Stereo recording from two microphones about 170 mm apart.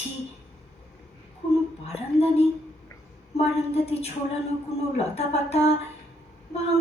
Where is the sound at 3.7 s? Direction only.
35° left (ahead or behind).